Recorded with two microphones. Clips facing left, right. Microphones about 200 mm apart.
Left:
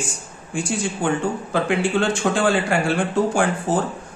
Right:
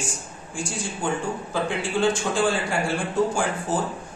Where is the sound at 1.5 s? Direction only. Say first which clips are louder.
Left 5 dB; 70° left (ahead or behind).